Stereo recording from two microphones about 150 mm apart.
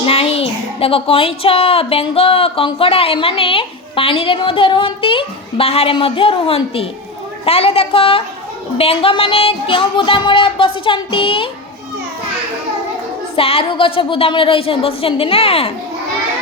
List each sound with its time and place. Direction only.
0.0 s speech: 40° left (ahead or behind)
13.3 s speech: 40° left (ahead or behind)